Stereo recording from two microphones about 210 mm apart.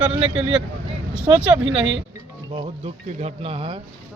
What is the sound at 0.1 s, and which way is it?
Speech, 25° right (ahead or behind).